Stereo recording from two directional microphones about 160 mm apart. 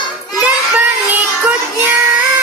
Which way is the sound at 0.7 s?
10° right (ahead or behind).